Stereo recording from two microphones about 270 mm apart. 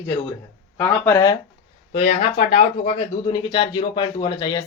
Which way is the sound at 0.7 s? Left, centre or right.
Centre.